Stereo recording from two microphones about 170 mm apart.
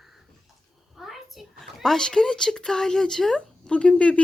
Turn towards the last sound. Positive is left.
turn(degrees=5)  # may be behind; listen again after turning